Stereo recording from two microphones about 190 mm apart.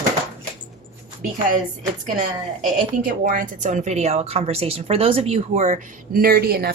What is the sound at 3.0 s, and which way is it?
A woman's voice, 45° right (ahead or behind).